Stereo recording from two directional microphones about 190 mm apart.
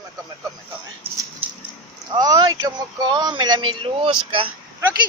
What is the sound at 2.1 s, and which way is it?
Speech, 20° right (ahead or behind).